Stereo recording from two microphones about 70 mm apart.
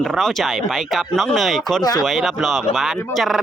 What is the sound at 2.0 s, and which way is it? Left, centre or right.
Speech, centre.